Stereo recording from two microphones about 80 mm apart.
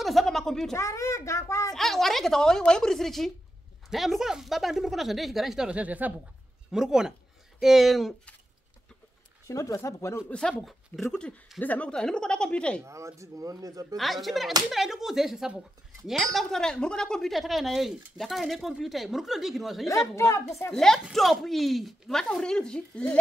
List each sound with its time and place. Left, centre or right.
0.0 s speech: centre
0.7 s a child's voice: left
1.7 s speech: centre
6.7 s speech: centre
9.5 s speech: left
10.6 s speech: centre
11.1 s a woman's voice: centre
11.9 s speech: centre
12.8 s speech: right
13.9 s speech: centre
20.2 s a child's voice: left
20.7 s speech: centre